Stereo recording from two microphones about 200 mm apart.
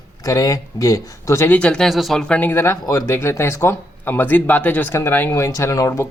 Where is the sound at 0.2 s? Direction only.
15° left (ahead or behind).